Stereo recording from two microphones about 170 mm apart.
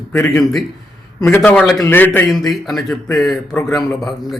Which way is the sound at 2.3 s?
Centre (ahead or behind).